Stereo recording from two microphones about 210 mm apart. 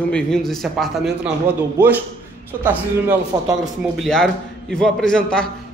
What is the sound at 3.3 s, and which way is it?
Speech, 20° right (ahead or behind).